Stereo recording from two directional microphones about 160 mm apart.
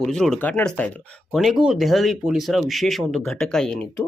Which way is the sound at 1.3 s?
Centre (ahead or behind).